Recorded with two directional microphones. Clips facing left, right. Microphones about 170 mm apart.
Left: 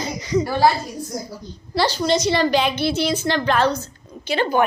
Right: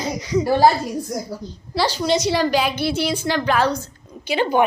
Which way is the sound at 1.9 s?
10° right (ahead or behind).